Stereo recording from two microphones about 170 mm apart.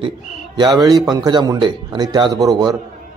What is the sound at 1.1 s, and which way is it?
A man's voice, 25° right (ahead or behind).